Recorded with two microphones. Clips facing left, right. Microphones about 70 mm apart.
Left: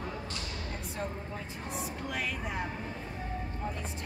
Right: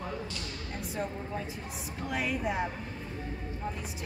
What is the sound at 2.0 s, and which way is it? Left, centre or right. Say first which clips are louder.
Speech: right 8 dB; centre.